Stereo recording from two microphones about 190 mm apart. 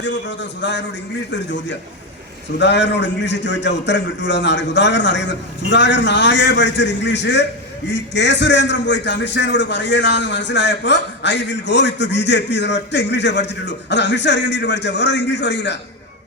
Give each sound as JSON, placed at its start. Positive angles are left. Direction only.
{"t": 0.0, "sound": "a man's voice", "side_deg": 70}